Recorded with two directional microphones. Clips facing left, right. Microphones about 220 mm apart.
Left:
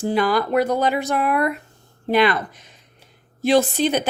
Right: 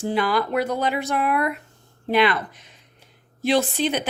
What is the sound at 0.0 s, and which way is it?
Speech, 40° left (ahead or behind).